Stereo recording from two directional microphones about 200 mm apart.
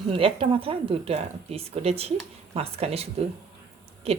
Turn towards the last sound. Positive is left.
turn(degrees=-30)  # may be behind; listen again after turning